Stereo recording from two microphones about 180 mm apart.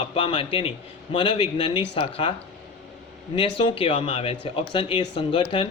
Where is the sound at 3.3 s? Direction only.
30° left (ahead or behind).